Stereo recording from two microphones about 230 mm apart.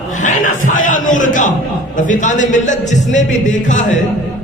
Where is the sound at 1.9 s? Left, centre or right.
Left.